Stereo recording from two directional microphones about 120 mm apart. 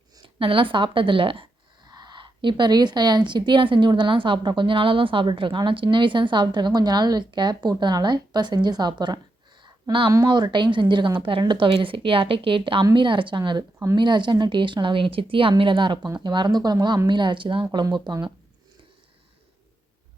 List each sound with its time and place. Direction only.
0.2 s a woman's voice: 50° right (ahead or behind)